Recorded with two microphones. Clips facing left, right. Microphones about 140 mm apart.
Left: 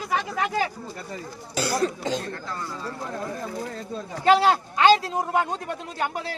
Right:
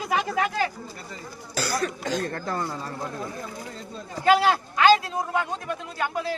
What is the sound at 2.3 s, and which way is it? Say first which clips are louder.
Speech: right 4 dB; 50° right (ahead or behind).